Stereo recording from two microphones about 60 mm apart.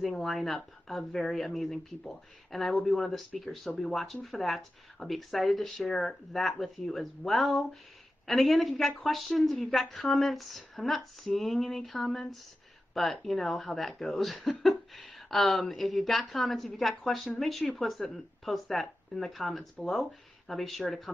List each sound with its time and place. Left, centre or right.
0.0 s speech: centre